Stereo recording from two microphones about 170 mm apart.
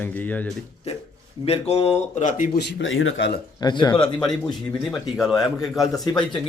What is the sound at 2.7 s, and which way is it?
Speech, 90° left.